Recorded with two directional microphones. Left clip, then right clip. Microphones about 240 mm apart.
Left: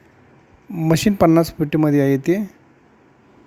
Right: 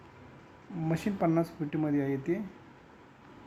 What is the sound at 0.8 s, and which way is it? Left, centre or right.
Speech, left.